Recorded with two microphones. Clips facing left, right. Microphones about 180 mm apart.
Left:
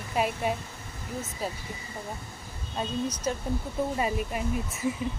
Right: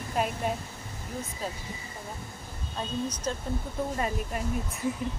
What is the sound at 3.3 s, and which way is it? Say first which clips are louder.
Speech: left 2 dB; 10° left (ahead or behind).